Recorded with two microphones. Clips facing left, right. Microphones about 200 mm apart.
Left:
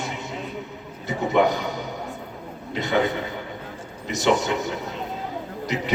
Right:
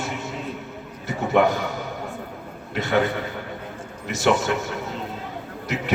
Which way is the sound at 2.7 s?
20° left (ahead or behind).